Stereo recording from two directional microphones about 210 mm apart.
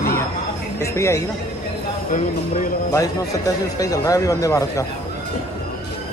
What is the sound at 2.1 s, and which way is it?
Speech, 40° left (ahead or behind).